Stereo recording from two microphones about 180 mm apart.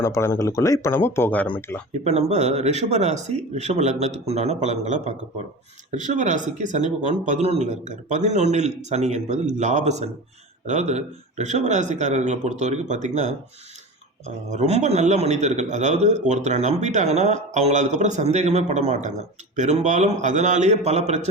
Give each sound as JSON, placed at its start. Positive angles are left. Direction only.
{"t": 0.0, "sound": "speech", "side_deg": 15}
{"t": 1.9, "sound": "a man's voice", "side_deg": -35}
{"t": 14.5, "sound": "a man's voice", "side_deg": -40}